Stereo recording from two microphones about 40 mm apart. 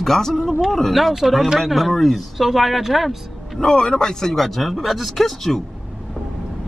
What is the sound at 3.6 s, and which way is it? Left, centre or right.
Speech, centre.